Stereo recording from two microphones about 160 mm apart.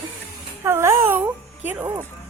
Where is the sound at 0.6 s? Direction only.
15° right (ahead or behind).